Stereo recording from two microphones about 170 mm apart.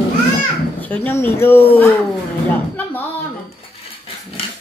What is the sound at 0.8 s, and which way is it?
Speech, 10° left (ahead or behind).